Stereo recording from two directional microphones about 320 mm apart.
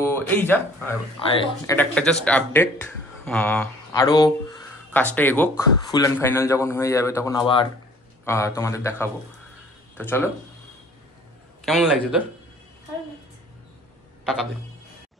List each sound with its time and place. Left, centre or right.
0.0 s a man's voice: centre
11.6 s a man's voice: centre
14.2 s speech: centre